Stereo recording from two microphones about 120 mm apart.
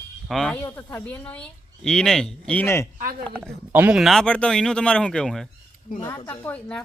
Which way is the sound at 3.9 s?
Centre (ahead or behind).